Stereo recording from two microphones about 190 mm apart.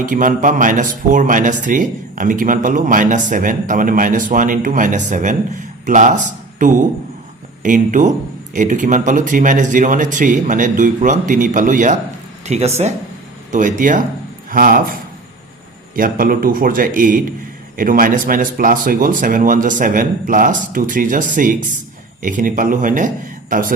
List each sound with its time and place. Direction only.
0.0 s speech: 45° right (ahead or behind)
16.0 s speech: 45° right (ahead or behind)